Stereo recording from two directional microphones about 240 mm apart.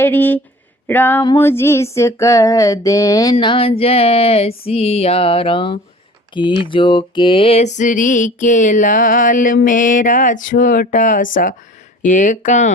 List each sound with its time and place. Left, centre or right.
0.0 s female singing: centre
3.3 s a sound: left
6.3 s music: left